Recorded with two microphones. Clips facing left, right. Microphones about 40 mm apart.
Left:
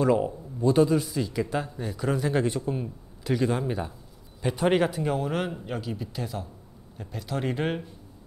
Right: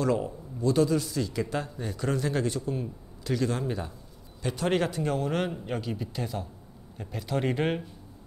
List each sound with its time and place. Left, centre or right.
0.0 s a man's voice: centre